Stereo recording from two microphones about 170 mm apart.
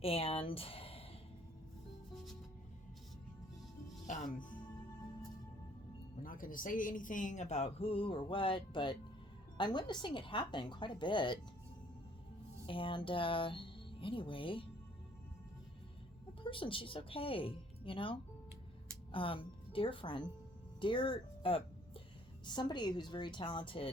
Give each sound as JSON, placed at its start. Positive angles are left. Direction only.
{"t": 0.0, "sound": "speech", "side_deg": 35}
{"t": 4.0, "sound": "speech", "side_deg": 45}
{"t": 6.2, "sound": "a woman's voice", "side_deg": 55}
{"t": 12.6, "sound": "speech", "side_deg": 30}
{"t": 16.4, "sound": "speech", "side_deg": 30}
{"t": 20.8, "sound": "music", "side_deg": 30}
{"t": 22.4, "sound": "a woman's voice", "side_deg": 25}